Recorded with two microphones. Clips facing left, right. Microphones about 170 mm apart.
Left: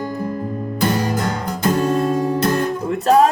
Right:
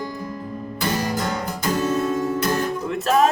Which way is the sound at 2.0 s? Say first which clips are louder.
Left 4 dB; 40° left (ahead or behind).